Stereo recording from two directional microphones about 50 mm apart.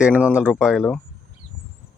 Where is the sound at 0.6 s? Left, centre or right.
Centre.